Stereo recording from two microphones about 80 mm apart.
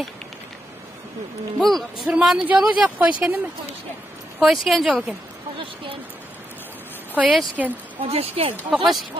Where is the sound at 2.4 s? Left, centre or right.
Centre.